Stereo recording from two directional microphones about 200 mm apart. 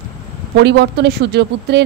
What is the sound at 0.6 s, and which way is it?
A woman's voice, 60° right (ahead or behind).